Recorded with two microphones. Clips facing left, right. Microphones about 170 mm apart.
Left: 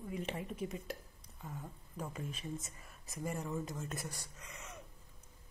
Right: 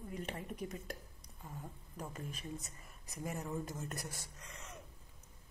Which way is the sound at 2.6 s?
Centre (ahead or behind).